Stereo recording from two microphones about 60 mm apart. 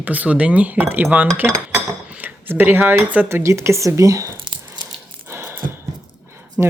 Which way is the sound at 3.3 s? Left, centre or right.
Right.